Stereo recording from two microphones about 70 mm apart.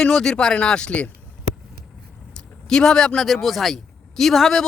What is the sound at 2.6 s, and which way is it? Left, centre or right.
Speech, centre.